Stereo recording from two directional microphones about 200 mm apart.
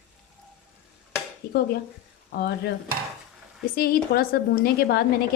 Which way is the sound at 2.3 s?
55° left (ahead or behind).